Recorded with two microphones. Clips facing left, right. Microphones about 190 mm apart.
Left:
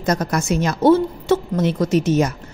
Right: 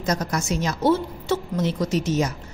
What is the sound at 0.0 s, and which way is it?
A woman's voice, 55° left (ahead or behind).